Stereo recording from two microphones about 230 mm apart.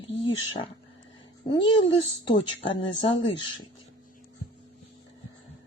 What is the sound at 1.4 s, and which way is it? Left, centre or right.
Speech, left.